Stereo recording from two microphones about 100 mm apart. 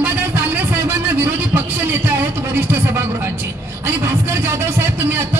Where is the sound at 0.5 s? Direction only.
20° right (ahead or behind).